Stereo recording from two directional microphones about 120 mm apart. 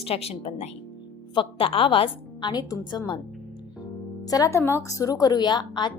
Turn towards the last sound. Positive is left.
turn(degrees=40)  # may be behind; listen again after turning